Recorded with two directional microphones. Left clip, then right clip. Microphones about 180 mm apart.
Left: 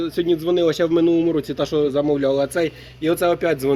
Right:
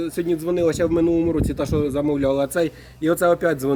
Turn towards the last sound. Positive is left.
turn(degrees=-60)  # may be behind; listen again after turning